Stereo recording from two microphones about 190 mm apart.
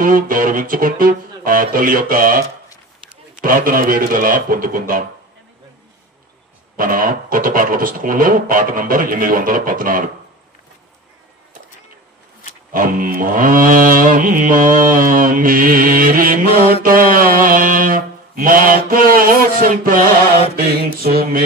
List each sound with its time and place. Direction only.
0.0 s mantra: 45° right (ahead or behind)
6.8 s mantra: 50° right (ahead or behind)
12.7 s mantra: 45° right (ahead or behind)